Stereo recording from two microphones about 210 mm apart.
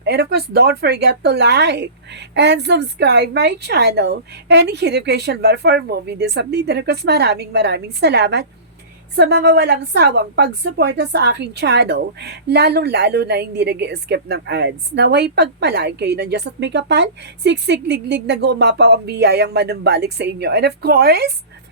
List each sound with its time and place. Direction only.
0.0 s a woman's voice: 50° right (ahead or behind)